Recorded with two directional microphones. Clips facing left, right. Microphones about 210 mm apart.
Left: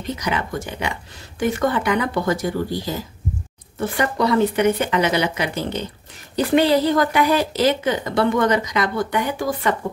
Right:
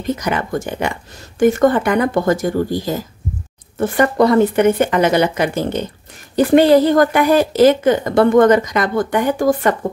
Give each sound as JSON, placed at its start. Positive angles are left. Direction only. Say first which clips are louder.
{"t": 0.1, "sound": "speech", "louder": "right 5 dB", "side_deg": -50}